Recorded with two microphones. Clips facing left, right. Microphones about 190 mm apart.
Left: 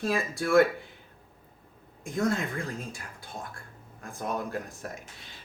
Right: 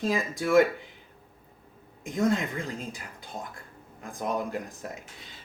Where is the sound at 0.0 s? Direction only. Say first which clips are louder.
Right 1 dB; 15° right (ahead or behind).